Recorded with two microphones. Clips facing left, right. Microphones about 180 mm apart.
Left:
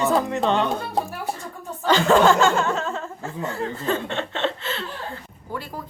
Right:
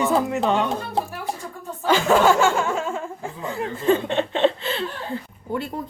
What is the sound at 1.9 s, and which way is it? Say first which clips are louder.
Speech: left 1 dB; 10° right (ahead or behind).